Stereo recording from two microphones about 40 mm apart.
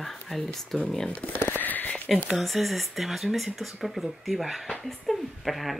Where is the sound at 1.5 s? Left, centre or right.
Left.